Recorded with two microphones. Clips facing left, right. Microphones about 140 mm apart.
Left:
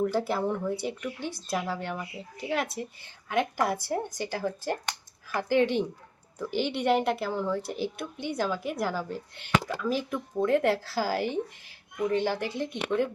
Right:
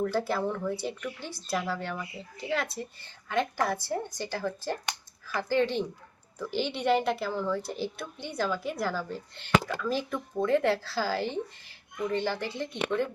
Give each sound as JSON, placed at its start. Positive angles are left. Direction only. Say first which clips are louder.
{"t": 0.0, "sound": "a woman's voice", "louder": "left 1 dB", "side_deg": 15}